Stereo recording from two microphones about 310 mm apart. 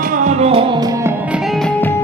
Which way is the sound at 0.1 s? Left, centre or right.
Right.